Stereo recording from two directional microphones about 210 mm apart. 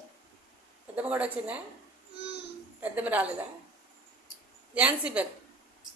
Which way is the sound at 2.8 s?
5° right (ahead or behind).